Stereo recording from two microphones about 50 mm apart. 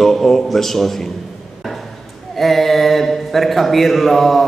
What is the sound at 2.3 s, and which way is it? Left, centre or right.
A man's voice, centre.